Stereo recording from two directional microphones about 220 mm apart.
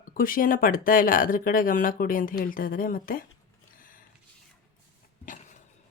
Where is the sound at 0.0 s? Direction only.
40° left (ahead or behind).